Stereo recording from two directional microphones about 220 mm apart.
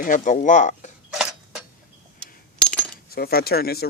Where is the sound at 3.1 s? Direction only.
45° left (ahead or behind).